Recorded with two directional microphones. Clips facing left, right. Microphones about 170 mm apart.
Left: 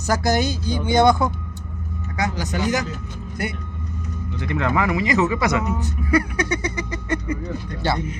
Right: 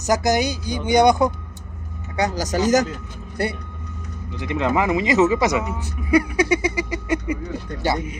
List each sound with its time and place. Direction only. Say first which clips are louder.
0.0 s speech: right 1 dB; 15° right (ahead or behind)
2.1 s speech: right 3 dB; 40° right (ahead or behind)
4.4 s speech: right 1 dB; 20° right (ahead or behind)